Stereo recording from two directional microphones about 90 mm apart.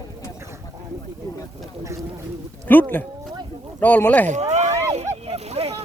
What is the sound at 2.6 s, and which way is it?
Speech, 20° left (ahead or behind).